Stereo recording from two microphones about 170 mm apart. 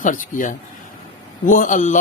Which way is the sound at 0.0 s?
50° left (ahead or behind).